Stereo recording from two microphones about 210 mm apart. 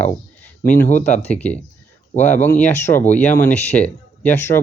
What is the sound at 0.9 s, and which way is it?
Speech, 35° left (ahead or behind).